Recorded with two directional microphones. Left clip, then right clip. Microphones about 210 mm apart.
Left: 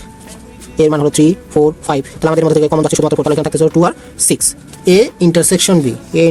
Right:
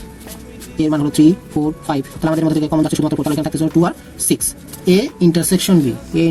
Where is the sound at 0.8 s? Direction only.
50° left (ahead or behind).